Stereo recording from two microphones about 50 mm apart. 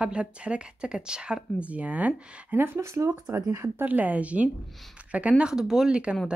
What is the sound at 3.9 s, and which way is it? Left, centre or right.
Speech, right.